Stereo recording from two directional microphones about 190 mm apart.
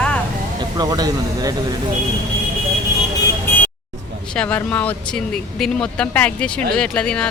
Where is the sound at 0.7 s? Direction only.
20° right (ahead or behind).